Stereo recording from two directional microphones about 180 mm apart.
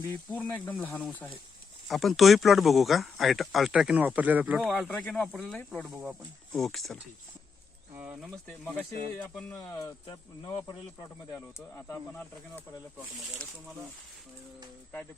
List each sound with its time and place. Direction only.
0.0 s speech: 10° left (ahead or behind); by 4.7 s 10° right (ahead or behind)
4.7 s speech: 5° left (ahead or behind)
9.3 s speech: 15° left (ahead or behind)
13.1 s speech: centre (ahead or behind)